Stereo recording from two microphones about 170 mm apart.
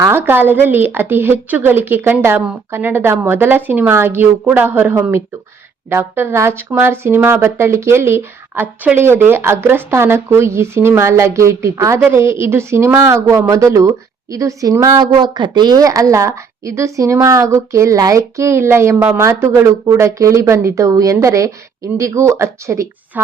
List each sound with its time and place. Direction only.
0.0 s speech: 15° right (ahead or behind)